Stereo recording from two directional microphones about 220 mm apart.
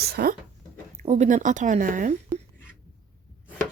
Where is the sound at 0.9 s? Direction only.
30° right (ahead or behind).